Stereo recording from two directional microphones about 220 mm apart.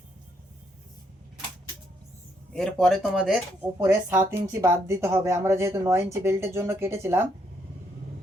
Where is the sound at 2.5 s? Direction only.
5° left (ahead or behind).